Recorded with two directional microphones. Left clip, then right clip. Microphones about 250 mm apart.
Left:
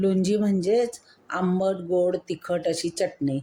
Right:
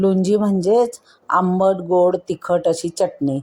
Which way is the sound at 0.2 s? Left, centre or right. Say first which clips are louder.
Right 6 dB; centre.